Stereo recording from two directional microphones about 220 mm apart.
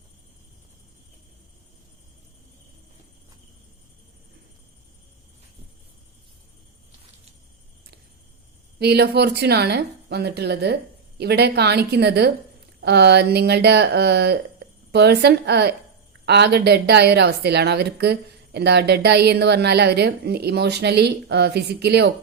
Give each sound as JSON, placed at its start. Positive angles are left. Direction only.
{"t": 8.8, "sound": "a woman's voice", "side_deg": -45}